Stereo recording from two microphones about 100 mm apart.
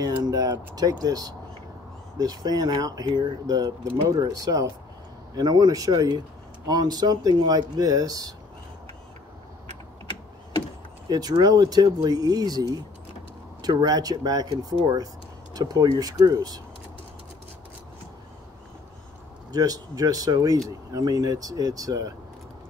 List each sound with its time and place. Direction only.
0.0 s speech: 40° right (ahead or behind)
11.1 s speech: 40° right (ahead or behind)
19.5 s speech: 40° right (ahead or behind)